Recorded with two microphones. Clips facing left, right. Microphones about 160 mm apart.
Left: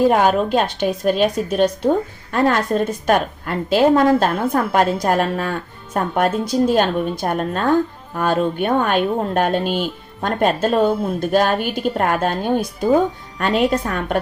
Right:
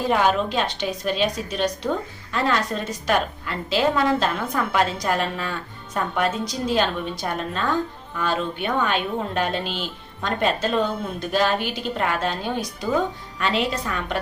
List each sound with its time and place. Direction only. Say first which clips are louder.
0.1 s speech: left 5 dB; 50° left (ahead or behind)